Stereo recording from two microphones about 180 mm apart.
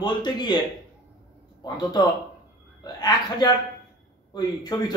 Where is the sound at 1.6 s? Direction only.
20° left (ahead or behind).